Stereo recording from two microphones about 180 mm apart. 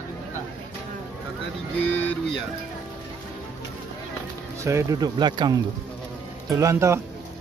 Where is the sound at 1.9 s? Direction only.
10° left (ahead or behind).